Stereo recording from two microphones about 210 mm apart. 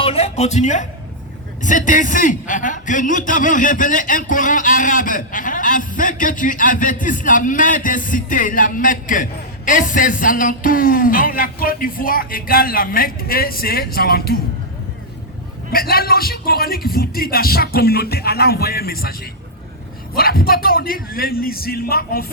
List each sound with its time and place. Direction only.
0.0 s music: 30° left (ahead or behind)
1.6 s a man's voice: 40° left (ahead or behind)
15.7 s speech: 45° left (ahead or behind)